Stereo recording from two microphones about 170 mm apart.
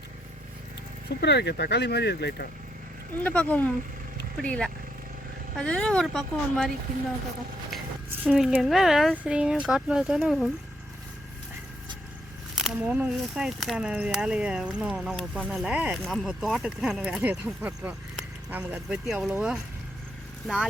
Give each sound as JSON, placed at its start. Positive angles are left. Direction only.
{"t": 1.2, "sound": "speech", "side_deg": 80}
{"t": 3.2, "sound": "speech", "side_deg": 10}
{"t": 8.2, "sound": "speech", "side_deg": -5}
{"t": 12.5, "sound": "speech", "side_deg": -5}